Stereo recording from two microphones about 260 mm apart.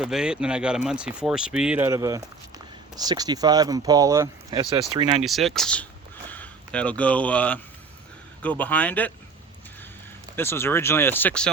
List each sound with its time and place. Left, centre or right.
0.0 s speech: centre
5.2 s speech: centre
10.3 s speech: centre